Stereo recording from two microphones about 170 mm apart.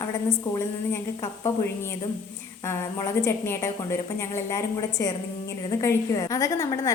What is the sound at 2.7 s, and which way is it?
A woman's voice, 15° left (ahead or behind).